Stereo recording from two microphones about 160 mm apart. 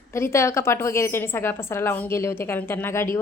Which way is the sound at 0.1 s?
15° left (ahead or behind).